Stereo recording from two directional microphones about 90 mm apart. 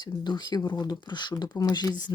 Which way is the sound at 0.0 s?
55° left (ahead or behind).